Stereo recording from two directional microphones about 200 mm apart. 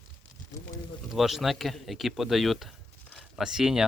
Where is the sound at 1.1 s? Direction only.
Centre (ahead or behind).